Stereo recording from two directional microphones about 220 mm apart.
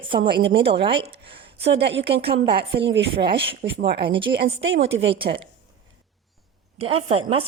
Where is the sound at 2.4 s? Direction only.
50° right (ahead or behind).